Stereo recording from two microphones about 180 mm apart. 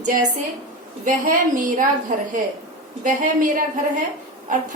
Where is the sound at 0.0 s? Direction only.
45° right (ahead or behind).